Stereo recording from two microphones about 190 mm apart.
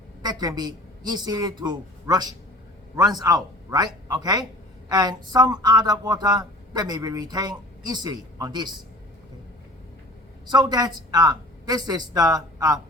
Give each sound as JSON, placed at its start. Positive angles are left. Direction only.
{"t": 0.2, "sound": "a woman's voice", "side_deg": -20}
{"t": 10.5, "sound": "speech", "side_deg": -20}